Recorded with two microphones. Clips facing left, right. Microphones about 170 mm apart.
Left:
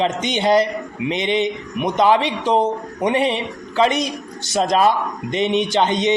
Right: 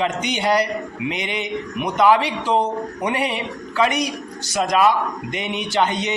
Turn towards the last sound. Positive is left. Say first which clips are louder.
# left 3 dB
turn(degrees=20)  # may be behind; listen again after turning